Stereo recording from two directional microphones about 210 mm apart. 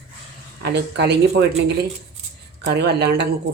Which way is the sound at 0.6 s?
50° right (ahead or behind).